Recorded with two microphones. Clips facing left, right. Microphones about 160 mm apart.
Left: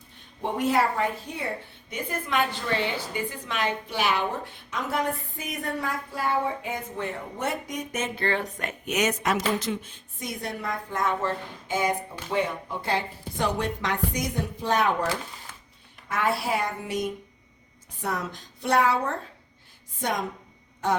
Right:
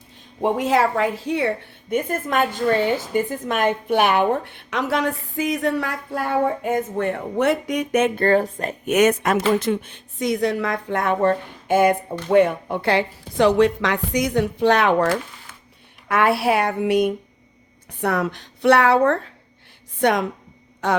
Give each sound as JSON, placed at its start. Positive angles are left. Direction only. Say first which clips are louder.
{"t": 0.4, "sound": "a woman's voice", "louder": "right 5 dB", "side_deg": -90}
{"t": 1.9, "sound": "a woman's voice", "louder": "right 8 dB", "side_deg": -50}
{"t": 8.9, "sound": "a woman's voice", "louder": "right 8 dB", "side_deg": -55}